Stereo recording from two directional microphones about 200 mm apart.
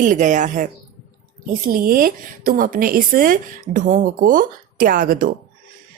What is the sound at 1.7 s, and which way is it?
A woman's voice, 45° right (ahead or behind).